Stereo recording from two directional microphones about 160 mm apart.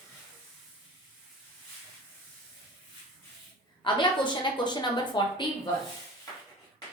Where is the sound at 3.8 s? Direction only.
30° left (ahead or behind).